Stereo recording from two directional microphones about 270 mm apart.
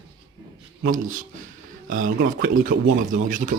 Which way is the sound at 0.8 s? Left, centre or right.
Right.